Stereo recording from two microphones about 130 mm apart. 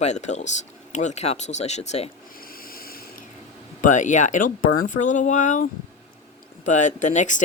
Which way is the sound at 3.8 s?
75° left (ahead or behind).